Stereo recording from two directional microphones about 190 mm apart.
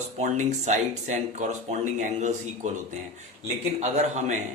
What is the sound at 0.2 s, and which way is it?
Speech, 40° right (ahead or behind).